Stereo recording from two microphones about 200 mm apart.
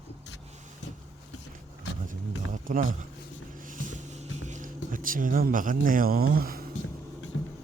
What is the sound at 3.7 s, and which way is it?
Music, 40° right (ahead or behind).